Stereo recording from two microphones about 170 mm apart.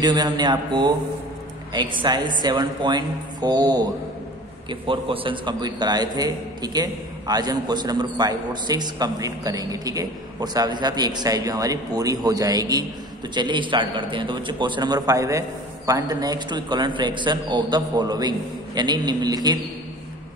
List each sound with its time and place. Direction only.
0.0 s a man's voice: 25° right (ahead or behind)